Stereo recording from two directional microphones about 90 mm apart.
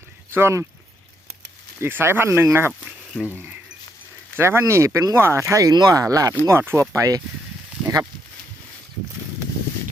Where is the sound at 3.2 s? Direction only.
20° left (ahead or behind).